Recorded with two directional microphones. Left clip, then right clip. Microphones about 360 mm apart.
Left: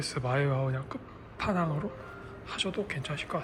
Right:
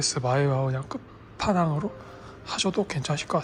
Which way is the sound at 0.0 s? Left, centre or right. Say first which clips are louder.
Right 6 dB; centre.